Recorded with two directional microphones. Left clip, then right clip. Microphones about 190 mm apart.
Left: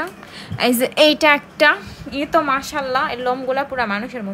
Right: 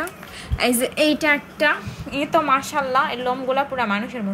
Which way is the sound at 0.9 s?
25° left (ahead or behind).